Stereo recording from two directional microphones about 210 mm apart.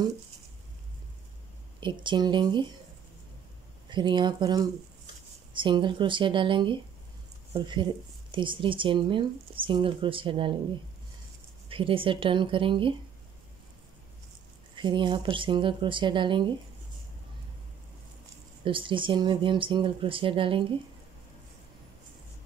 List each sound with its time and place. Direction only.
1.8 s speech: 20° right (ahead or behind)
3.9 s speech: 20° right (ahead or behind)
11.7 s speech: 25° right (ahead or behind)
14.8 s speech: 20° right (ahead or behind)
18.6 s speech: 25° right (ahead or behind)